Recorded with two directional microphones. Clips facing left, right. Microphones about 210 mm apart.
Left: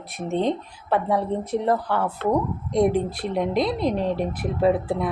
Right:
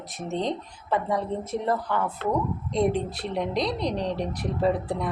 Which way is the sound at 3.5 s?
5° left (ahead or behind).